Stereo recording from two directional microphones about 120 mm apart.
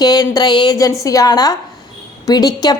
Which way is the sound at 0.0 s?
35° left (ahead or behind).